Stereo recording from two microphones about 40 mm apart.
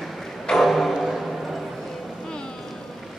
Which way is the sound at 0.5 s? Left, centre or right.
Centre.